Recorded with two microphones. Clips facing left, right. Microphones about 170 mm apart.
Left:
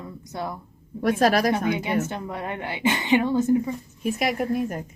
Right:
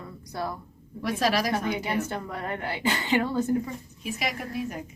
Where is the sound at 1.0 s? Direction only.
50° left (ahead or behind).